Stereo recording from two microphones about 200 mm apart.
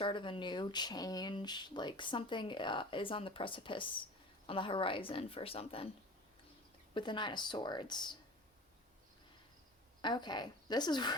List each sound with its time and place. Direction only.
0.0 s speech: 25° left (ahead or behind)
6.9 s speech: 25° left (ahead or behind)
10.0 s speech: 20° left (ahead or behind)